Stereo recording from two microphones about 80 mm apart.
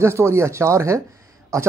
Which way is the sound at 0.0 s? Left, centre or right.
Right.